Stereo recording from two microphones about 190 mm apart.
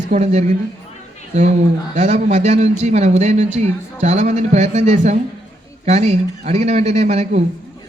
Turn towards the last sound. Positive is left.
turn(degrees=-35)  # may be behind; listen again after turning